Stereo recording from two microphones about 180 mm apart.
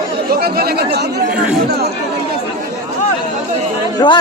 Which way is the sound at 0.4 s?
60° right (ahead or behind).